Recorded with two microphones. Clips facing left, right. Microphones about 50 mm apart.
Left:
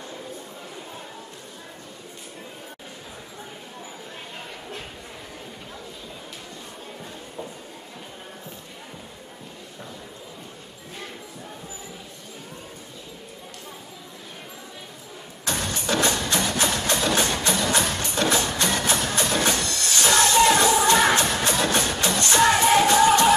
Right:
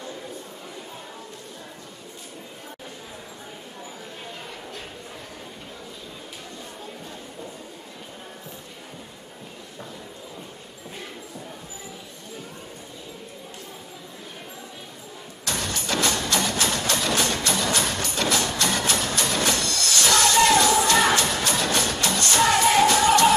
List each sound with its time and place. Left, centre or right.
15.4 s music: left
19.0 s train: centre
20.8 s music: left